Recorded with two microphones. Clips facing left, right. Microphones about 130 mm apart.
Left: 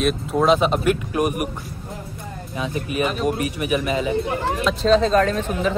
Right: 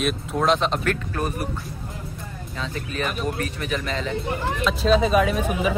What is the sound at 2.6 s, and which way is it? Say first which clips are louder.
Speech: left 5 dB; 15° left (ahead or behind).